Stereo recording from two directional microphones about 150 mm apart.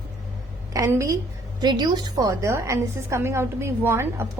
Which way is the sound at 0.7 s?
20° right (ahead or behind).